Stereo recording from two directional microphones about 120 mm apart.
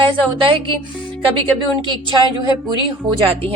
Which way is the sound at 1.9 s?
35° right (ahead or behind).